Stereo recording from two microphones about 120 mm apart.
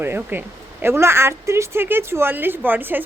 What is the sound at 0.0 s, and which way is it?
Speech, 15° right (ahead or behind).